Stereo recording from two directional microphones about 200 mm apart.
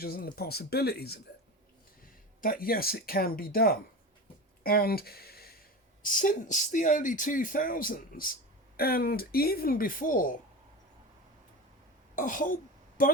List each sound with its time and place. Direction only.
0.0 s speech: 50° left (ahead or behind)
2.4 s speech: 45° left (ahead or behind)
12.1 s speech: 40° left (ahead or behind)